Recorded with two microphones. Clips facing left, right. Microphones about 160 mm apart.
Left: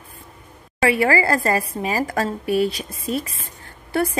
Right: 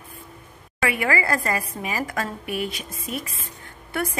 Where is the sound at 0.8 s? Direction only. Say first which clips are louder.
Left 6 dB; 30° left (ahead or behind).